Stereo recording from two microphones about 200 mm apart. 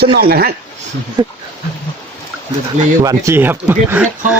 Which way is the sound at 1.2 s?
20° right (ahead or behind).